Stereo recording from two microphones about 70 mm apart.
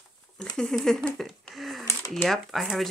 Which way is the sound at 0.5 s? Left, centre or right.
Centre.